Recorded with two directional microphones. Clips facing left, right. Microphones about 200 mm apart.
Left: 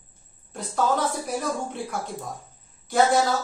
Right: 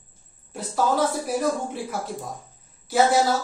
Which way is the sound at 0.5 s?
Centre (ahead or behind).